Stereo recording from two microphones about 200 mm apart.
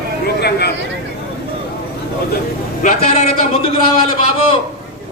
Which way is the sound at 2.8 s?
35° left (ahead or behind).